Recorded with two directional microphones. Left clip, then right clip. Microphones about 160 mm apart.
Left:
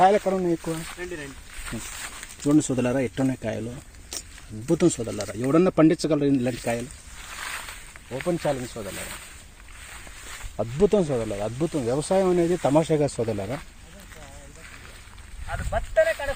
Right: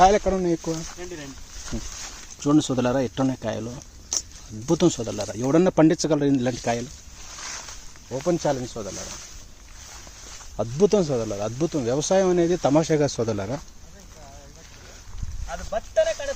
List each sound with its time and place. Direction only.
0.0 s speech: 10° right (ahead or behind)
2.6 s speech: centre (ahead or behind)
4.1 s a sound: centre (ahead or behind)
4.6 s speech: centre (ahead or behind)
8.1 s speech: 10° right (ahead or behind)
10.8 s speech: centre (ahead or behind)
15.7 s a sound: 35° right (ahead or behind)